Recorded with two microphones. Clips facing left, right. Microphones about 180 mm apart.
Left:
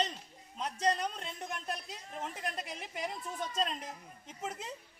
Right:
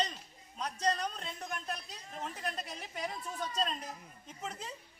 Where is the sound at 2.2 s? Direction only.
20° left (ahead or behind).